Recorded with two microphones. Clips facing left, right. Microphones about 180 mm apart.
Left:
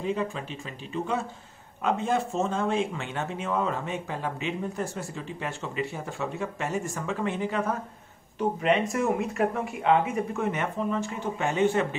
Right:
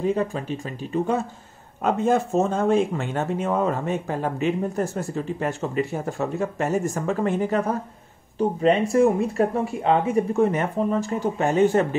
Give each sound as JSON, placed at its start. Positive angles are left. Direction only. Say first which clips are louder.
{"t": 0.0, "sound": "speech", "louder": "right 6 dB", "side_deg": -45}